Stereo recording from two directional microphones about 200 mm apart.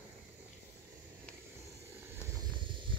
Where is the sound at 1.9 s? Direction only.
15° right (ahead or behind).